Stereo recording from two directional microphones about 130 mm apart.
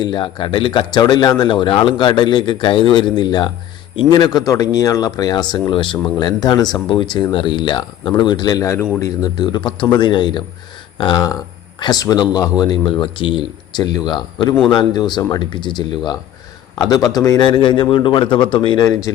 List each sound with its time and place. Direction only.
0.0 s speech: 35° left (ahead or behind)
18.9 s speech: 25° left (ahead or behind)